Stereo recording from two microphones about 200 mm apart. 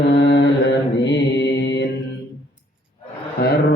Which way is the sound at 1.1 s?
60° left (ahead or behind).